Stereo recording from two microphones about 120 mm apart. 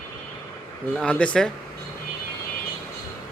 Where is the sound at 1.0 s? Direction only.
10° left (ahead or behind).